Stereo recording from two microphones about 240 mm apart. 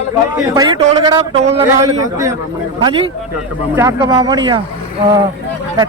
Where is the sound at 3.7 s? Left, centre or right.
Centre.